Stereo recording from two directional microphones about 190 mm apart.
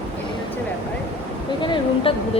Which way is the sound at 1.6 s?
25° left (ahead or behind).